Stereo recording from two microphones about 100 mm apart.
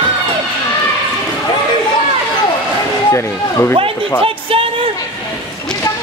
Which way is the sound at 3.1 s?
25° left (ahead or behind).